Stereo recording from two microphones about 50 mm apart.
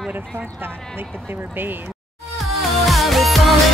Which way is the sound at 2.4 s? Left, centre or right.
Centre.